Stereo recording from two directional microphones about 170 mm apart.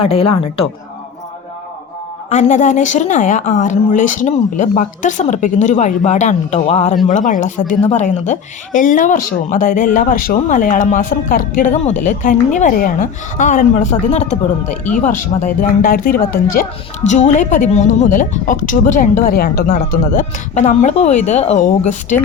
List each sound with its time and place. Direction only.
0.0 s a woman's voice: 35° left (ahead or behind)
2.3 s speech: 45° left (ahead or behind)
20.6 s a woman's voice: 40° left (ahead or behind)